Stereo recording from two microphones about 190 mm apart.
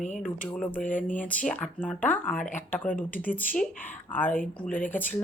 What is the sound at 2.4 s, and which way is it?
Speech, 40° left (ahead or behind).